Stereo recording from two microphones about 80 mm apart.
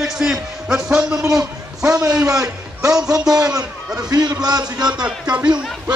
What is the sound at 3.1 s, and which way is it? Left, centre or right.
A man's voice, right.